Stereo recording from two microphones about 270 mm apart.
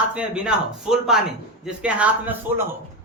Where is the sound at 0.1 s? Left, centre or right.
Centre.